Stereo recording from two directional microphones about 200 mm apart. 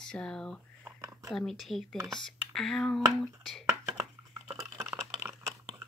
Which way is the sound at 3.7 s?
15° right (ahead or behind).